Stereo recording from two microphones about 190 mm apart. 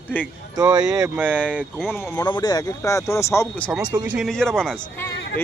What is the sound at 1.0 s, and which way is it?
Speech, 10° right (ahead or behind).